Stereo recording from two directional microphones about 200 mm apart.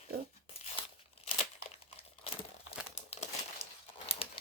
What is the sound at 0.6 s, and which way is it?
Tearing, 30° left (ahead or behind).